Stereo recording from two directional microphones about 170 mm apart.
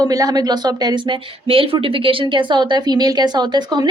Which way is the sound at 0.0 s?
20° right (ahead or behind).